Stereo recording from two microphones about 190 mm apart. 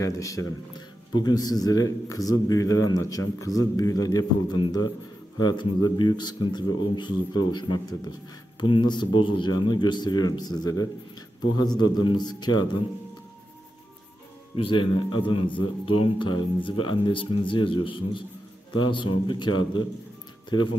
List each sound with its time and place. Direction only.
0.0 s a man's voice: 15° left (ahead or behind)
14.5 s a man's voice: 30° left (ahead or behind)